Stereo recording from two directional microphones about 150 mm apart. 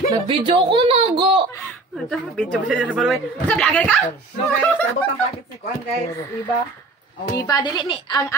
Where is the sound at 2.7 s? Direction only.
10° right (ahead or behind).